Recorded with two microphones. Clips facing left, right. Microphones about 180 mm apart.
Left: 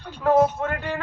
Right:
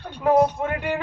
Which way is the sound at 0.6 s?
15° right (ahead or behind).